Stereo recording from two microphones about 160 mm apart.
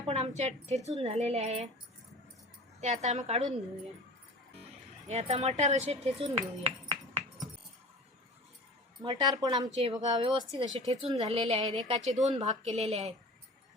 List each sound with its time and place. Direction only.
0.1 s a woman's voice: 45° right (ahead or behind)
2.8 s a woman's voice: 45° right (ahead or behind)
5.0 s speech: 40° right (ahead or behind)
9.0 s a woman's voice: 25° right (ahead or behind)
9.6 s a woman's voice: 45° right (ahead or behind)